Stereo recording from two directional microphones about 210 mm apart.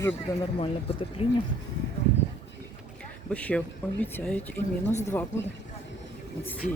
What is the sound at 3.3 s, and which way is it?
Speech, 5° left (ahead or behind).